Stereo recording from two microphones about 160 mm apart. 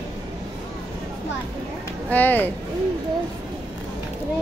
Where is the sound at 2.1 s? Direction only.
10° left (ahead or behind).